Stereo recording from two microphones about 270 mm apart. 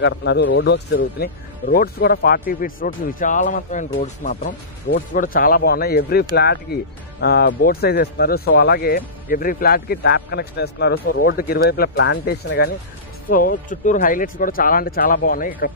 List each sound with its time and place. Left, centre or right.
0.0 s a man's voice: left